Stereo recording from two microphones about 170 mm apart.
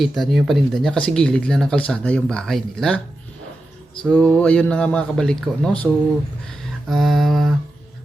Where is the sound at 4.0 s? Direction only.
5° left (ahead or behind).